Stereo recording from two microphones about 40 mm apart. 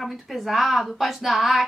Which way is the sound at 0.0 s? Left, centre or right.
Centre.